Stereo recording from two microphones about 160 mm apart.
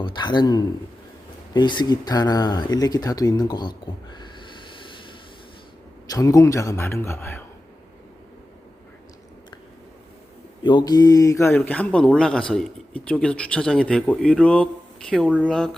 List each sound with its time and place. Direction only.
0.0 s a man's voice: 30° left (ahead or behind)
6.1 s speech: 20° left (ahead or behind)
10.6 s speech: 30° left (ahead or behind); by 15.7 s centre (ahead or behind)